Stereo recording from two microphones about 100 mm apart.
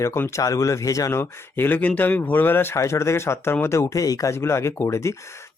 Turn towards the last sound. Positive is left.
turn(degrees=30)  # may be behind; listen again after turning